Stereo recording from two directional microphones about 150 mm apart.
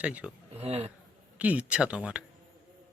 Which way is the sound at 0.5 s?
45° right (ahead or behind).